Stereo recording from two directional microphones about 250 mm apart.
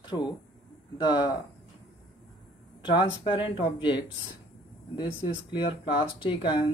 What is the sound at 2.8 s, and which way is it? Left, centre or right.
Speech, centre.